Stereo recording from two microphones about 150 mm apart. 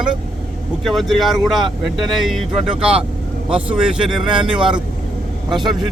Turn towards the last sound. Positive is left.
turn(degrees=-30)  # may be behind; listen again after turning